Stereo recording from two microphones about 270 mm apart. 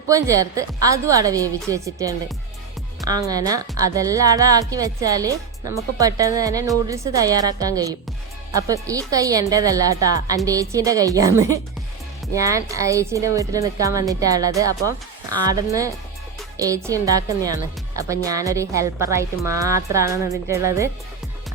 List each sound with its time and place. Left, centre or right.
0.1 s a woman's voice: centre